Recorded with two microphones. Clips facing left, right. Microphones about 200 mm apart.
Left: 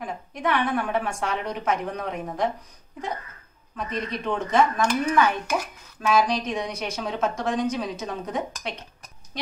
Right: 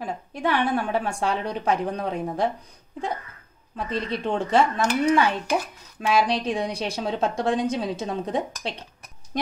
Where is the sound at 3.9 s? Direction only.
30° right (ahead or behind).